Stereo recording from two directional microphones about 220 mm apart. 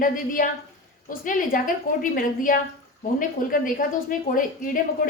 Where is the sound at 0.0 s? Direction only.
40° left (ahead or behind).